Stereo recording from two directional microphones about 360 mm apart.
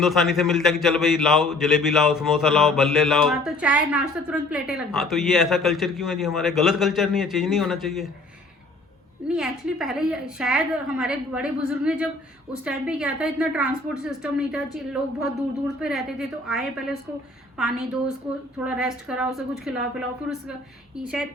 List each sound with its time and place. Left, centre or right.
0.0 s a man's voice: centre
9.3 s a man's voice: centre
20.9 s a man's voice: centre